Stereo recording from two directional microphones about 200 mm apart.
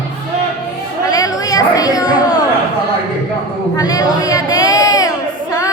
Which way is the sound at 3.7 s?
20° left (ahead or behind).